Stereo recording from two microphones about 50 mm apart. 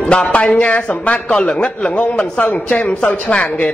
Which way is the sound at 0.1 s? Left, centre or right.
Left.